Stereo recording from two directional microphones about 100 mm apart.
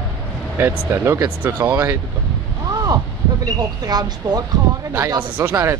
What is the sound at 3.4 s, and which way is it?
Speech, 40° right (ahead or behind).